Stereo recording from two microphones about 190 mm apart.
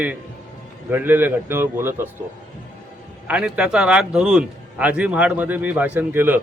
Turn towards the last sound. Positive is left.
turn(degrees=-10)  # may be behind; listen again after turning